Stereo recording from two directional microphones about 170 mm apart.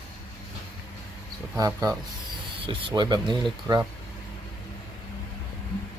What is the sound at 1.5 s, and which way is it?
Speech, 20° right (ahead or behind).